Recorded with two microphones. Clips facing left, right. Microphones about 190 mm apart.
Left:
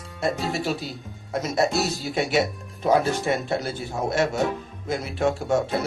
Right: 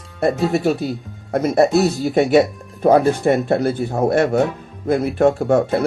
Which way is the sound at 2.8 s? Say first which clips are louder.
Right 7 dB; 55° right (ahead or behind).